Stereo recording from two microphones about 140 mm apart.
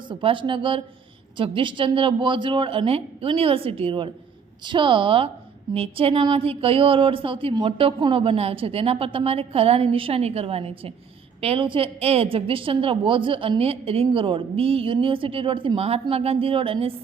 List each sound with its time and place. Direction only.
0.1 s a woman's voice: 40° right (ahead or behind)